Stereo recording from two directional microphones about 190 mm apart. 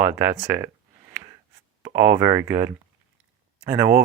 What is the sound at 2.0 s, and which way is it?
Speech, 15° right (ahead or behind).